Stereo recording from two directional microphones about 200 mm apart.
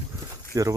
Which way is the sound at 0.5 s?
15° right (ahead or behind).